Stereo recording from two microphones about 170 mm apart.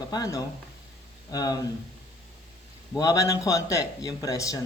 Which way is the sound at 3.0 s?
20° left (ahead or behind).